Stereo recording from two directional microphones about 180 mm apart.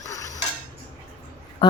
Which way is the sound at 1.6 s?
30° left (ahead or behind).